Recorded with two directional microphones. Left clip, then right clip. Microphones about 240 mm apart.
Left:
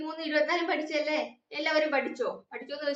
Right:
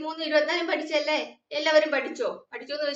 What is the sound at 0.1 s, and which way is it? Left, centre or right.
A woman's voice, centre.